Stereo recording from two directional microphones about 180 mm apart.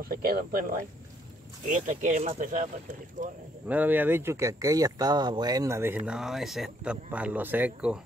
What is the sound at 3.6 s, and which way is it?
Speech, 10° right (ahead or behind).